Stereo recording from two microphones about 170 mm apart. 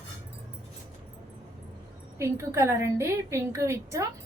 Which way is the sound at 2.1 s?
15° right (ahead or behind).